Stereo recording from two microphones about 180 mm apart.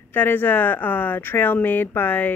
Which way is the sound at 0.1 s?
10° left (ahead or behind).